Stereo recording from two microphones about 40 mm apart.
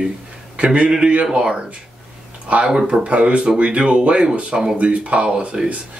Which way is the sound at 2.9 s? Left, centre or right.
Right.